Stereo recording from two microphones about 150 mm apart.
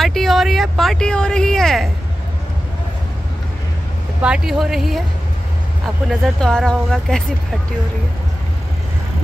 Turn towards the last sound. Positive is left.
turn(degrees=5)  # may be behind; listen again after turning